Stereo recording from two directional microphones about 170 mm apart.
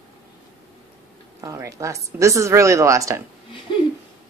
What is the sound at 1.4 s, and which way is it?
Speech, 20° right (ahead or behind).